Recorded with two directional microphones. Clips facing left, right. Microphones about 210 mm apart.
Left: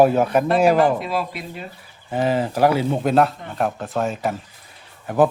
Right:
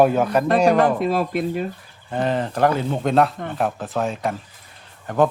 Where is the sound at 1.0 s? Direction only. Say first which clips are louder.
Right 5 dB; 50° right (ahead or behind).